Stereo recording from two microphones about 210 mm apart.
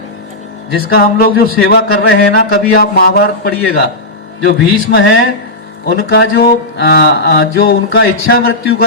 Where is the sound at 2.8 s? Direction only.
45° left (ahead or behind).